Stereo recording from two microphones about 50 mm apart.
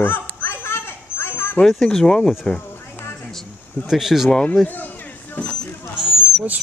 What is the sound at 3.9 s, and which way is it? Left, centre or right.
Speech, centre.